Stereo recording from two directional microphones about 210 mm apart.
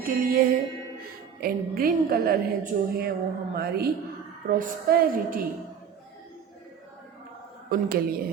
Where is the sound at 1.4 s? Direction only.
45° right (ahead or behind).